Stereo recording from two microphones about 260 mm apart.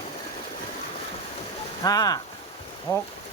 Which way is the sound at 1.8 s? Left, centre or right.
Centre.